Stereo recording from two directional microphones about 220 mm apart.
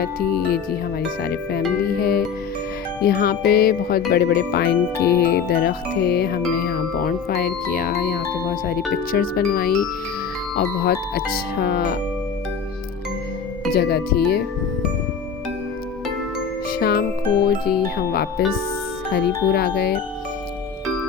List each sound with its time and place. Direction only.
0.0 s speech: 45° left (ahead or behind)
13.7 s speech: 45° left (ahead or behind)
16.6 s music: 45° left (ahead or behind)
17.4 s speech: 45° left (ahead or behind)